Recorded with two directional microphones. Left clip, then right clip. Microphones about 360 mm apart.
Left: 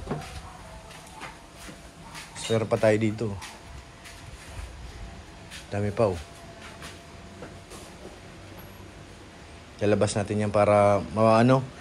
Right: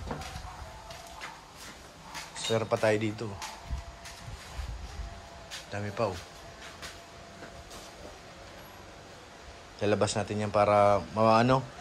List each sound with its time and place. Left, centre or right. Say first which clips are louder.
2.5 s speech: left 4 dB; centre
5.7 s speech: left 7 dB; centre
9.8 s speech: left 4 dB; centre